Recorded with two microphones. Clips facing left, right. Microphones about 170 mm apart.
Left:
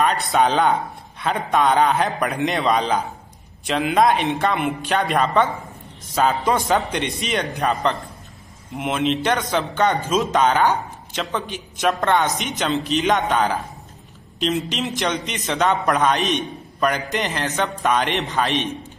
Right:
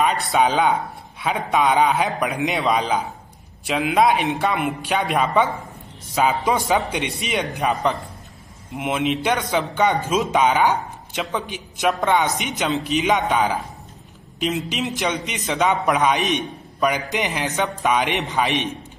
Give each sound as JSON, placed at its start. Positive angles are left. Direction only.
{"t": 0.0, "sound": "a man's voice", "side_deg": 0}